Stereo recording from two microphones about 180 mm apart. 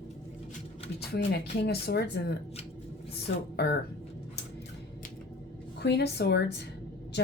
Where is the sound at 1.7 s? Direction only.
60° left (ahead or behind).